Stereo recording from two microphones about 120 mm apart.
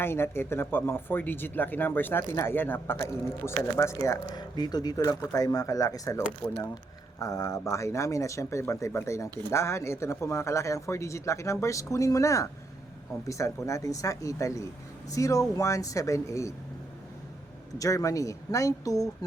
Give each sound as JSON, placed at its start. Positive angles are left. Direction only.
{"t": 0.0, "sound": "a man's voice", "side_deg": 20}
{"t": 17.7, "sound": "a man's voice", "side_deg": 25}